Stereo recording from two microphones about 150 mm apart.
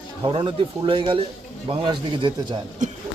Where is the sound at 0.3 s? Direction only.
35° right (ahead or behind).